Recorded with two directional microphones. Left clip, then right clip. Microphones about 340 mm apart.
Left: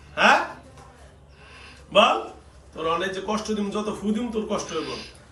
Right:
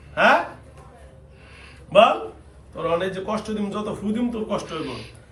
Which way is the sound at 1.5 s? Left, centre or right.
Centre.